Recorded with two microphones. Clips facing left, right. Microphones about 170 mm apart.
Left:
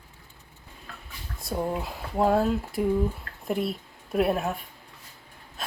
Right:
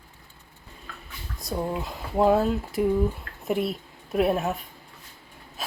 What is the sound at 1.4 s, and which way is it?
Speech, 5° left (ahead or behind).